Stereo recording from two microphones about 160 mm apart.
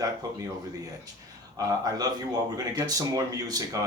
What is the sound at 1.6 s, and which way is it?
Speech, 25° right (ahead or behind).